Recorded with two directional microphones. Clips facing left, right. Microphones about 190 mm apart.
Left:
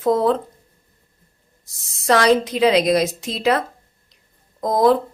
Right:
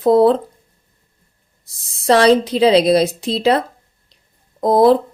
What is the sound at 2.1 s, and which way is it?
Speech, 30° right (ahead or behind).